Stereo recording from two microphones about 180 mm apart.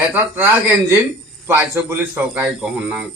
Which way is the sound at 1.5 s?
10° right (ahead or behind).